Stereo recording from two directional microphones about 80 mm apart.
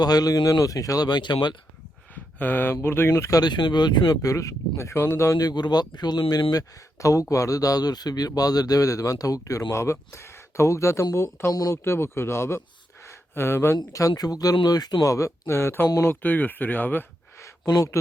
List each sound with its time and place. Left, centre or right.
0.0 s speech: left
2.1 s a sound: left
2.8 s speech: left
3.1 s speech: left
3.4 s speech: left
4.2 s speech: left
5.4 s speech: left
6.5 s speech: left
11.5 s speech: left
11.8 s speech: left
13.1 s a sound: left
14.1 s speech: left
17.7 s speech: left